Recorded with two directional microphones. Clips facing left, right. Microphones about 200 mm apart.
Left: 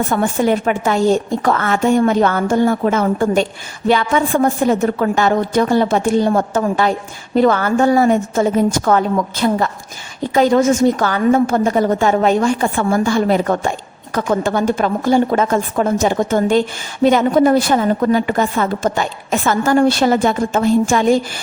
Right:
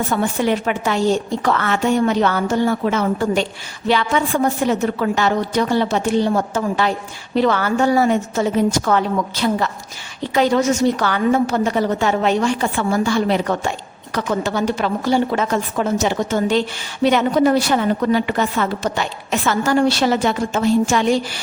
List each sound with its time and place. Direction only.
0.1 s a woman's voice: 50° left (ahead or behind)